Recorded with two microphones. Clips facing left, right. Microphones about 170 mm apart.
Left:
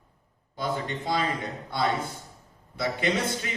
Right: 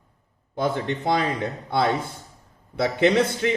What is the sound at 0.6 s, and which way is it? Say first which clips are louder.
Speech: right 6 dB; 65° right (ahead or behind).